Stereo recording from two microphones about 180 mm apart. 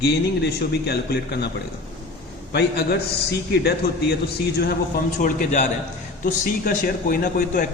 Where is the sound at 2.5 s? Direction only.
65° left (ahead or behind).